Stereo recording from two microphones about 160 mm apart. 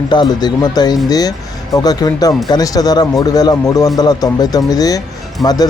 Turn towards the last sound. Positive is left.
turn(degrees=25)  # may be behind; listen again after turning